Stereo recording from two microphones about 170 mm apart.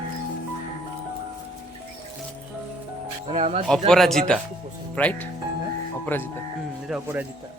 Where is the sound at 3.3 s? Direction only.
40° right (ahead or behind).